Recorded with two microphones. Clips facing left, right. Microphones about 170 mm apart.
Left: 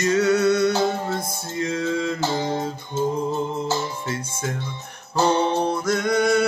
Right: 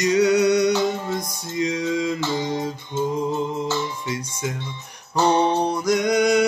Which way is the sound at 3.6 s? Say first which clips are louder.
Even; 40° left (ahead or behind).